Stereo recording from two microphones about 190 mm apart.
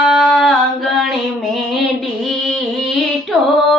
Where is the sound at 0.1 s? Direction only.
Centre (ahead or behind).